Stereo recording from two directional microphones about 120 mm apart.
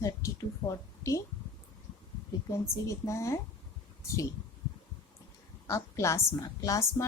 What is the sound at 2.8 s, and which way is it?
Speech, 25° left (ahead or behind).